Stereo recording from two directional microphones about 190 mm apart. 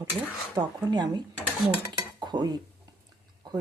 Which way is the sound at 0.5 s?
20° right (ahead or behind).